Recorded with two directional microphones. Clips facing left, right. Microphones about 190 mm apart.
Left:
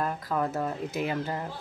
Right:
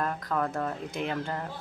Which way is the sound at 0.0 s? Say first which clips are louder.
Left 1 dB; 10° left (ahead or behind).